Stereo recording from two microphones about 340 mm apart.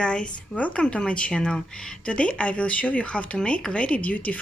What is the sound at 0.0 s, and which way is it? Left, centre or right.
Speech, centre.